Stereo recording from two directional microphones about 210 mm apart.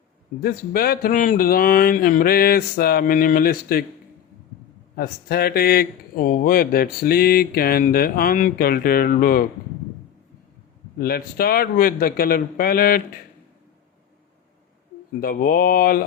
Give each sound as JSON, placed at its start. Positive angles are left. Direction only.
{"t": 0.3, "sound": "speech", "side_deg": 45}
{"t": 4.9, "sound": "speech", "side_deg": 45}
{"t": 10.9, "sound": "speech", "side_deg": 45}
{"t": 15.2, "sound": "speech", "side_deg": 40}